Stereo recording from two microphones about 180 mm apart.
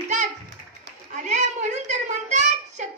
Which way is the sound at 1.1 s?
40° right (ahead or behind).